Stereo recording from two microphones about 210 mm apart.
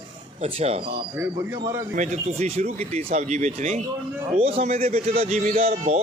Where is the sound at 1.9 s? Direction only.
35° right (ahead or behind).